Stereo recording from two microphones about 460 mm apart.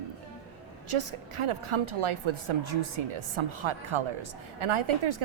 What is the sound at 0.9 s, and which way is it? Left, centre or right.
A woman's voice, right.